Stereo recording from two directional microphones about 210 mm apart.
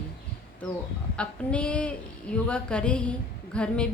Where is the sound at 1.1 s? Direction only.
5° left (ahead or behind).